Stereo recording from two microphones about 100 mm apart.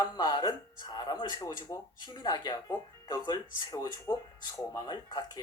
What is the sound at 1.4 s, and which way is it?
Speech, 35° left (ahead or behind).